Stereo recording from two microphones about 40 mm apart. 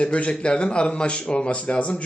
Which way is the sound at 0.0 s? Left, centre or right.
Left.